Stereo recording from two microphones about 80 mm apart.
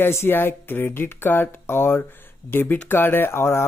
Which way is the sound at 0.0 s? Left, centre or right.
Left.